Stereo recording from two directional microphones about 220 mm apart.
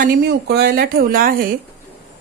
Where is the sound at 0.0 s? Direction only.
40° right (ahead or behind).